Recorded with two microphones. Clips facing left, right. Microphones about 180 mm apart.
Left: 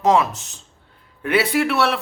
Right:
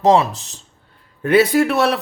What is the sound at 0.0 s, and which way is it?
A man's voice, 35° right (ahead or behind).